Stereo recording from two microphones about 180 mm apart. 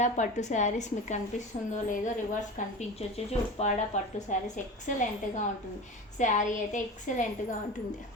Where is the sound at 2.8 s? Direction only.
35° left (ahead or behind).